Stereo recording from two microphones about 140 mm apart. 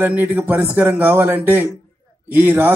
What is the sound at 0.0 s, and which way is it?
Speech, 15° right (ahead or behind).